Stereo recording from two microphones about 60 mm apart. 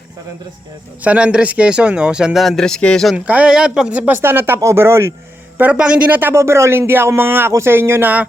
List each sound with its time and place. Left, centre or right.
1.0 s speech: right
2.4 s speech: centre
3.2 s speech: right
3.5 s speech: centre
4.2 s speech: right
4.6 s speech: right
5.7 s speech: centre
6.1 s speech: right
6.3 s speech: right